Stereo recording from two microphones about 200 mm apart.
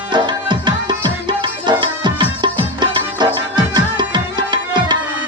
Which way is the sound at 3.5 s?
20° right (ahead or behind).